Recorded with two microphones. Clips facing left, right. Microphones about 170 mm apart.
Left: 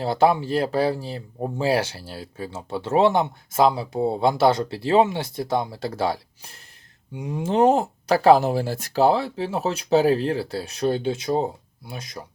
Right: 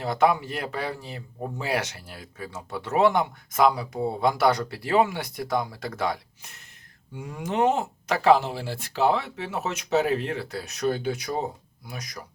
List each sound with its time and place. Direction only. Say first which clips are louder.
0.0 s speech: left 3 dB; 30° left (ahead or behind)
7.1 s speech: left 6 dB; 20° left (ahead or behind)